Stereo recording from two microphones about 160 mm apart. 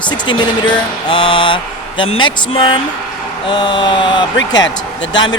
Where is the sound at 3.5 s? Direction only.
30° left (ahead or behind).